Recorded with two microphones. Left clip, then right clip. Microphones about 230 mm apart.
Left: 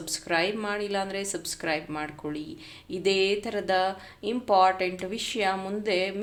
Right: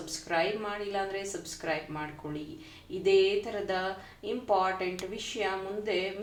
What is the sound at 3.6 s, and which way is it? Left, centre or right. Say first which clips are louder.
A woman's voice: left 7 dB; left.